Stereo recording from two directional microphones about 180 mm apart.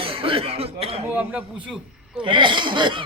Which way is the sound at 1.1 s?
10° right (ahead or behind).